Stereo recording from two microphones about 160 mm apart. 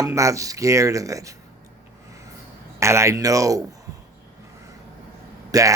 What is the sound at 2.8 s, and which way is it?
Speech, 20° right (ahead or behind).